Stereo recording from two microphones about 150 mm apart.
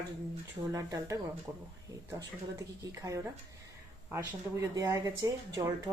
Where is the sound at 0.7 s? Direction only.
20° right (ahead or behind).